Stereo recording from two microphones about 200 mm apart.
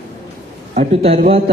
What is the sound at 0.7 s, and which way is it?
Speech, 35° right (ahead or behind).